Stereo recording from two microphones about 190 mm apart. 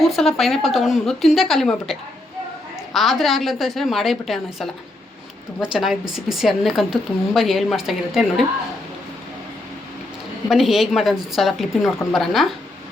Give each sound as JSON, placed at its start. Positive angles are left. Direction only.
{"t": 0.0, "sound": "a woman's voice", "side_deg": 0}
{"t": 5.7, "sound": "a woman's voice", "side_deg": 0}
{"t": 10.5, "sound": "a woman's voice", "side_deg": 0}